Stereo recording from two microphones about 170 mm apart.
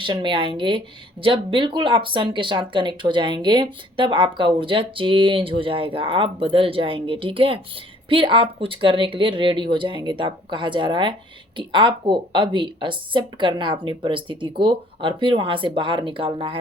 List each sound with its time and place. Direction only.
0.0 s speech: 25° right (ahead or behind)